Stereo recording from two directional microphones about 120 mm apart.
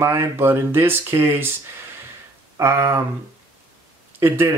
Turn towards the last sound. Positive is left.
turn(degrees=-20)  # may be behind; listen again after turning